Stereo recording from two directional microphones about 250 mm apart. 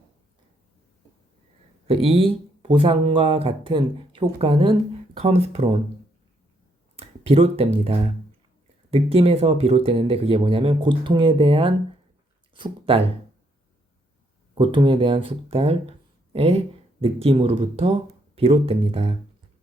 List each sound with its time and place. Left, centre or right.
1.9 s speech: right
6.9 s speech: right
14.6 s speech: centre